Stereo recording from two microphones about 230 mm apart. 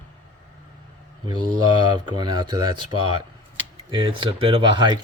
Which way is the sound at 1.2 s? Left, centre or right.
Centre.